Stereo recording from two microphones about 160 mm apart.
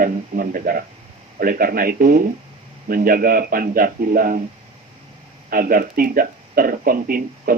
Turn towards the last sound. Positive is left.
turn(degrees=-60)  # may be behind; listen again after turning